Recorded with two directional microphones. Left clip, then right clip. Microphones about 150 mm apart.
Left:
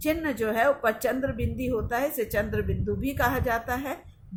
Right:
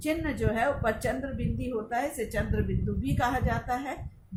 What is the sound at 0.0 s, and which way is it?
Speech, 75° left (ahead or behind).